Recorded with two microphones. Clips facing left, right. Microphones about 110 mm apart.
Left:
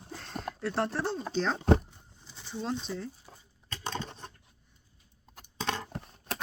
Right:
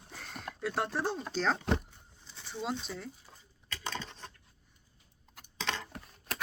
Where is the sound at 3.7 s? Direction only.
35° left (ahead or behind).